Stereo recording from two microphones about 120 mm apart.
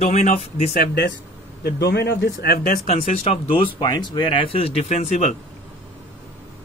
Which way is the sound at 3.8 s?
35° left (ahead or behind).